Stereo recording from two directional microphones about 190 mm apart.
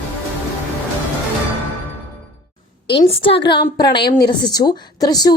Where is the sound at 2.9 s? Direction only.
30° left (ahead or behind).